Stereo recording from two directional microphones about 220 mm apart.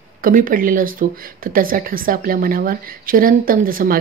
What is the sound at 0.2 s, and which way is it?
Speech, 40° right (ahead or behind).